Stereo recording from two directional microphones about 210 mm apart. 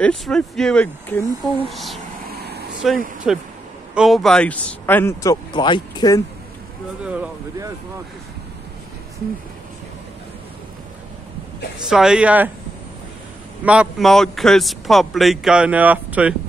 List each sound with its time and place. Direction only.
0.0 s a man's voice: 5° left (ahead or behind)
2.2 s vehicle: 50° right (ahead or behind)
2.8 s a man's voice: centre (ahead or behind); by 6.2 s 20° left (ahead or behind)
7.0 s a man's voice: 5° right (ahead or behind)
11.9 s a man's voice: 5° right (ahead or behind)
13.7 s a man's voice: 5° right (ahead or behind)